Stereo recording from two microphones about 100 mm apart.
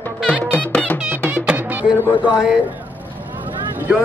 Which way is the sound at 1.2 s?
10° right (ahead or behind).